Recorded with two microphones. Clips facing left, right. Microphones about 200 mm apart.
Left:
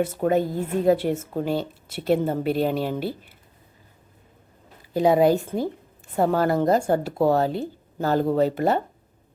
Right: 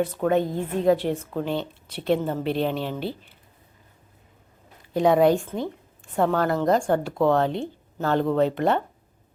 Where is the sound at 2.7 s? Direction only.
45° left (ahead or behind).